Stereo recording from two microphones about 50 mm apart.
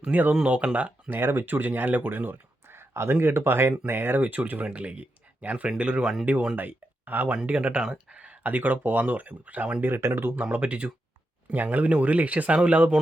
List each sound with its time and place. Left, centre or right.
0.1 s speech: right
1.1 s speech: right
2.6 s speech: right
4.2 s speech: right
4.6 s speech: right
6.0 s speech: centre
6.6 s speech: right
10.0 s speech: right
10.4 s speech: right